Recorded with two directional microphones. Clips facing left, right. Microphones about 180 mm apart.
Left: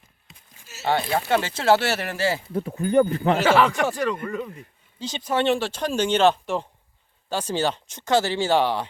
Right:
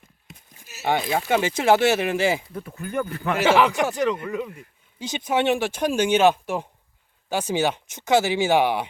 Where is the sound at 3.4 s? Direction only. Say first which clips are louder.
Right 3 dB; 15° right (ahead or behind).